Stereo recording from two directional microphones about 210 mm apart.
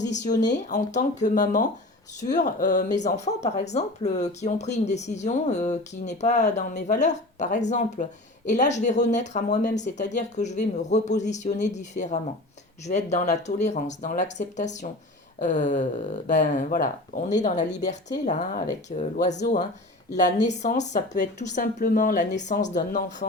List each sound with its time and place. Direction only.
0.1 s speech: 35° left (ahead or behind)